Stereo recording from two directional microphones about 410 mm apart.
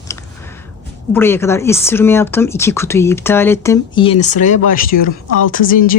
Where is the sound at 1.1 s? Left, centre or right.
Centre.